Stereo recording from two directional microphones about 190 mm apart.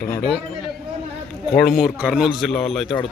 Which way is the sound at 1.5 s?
Centre (ahead or behind).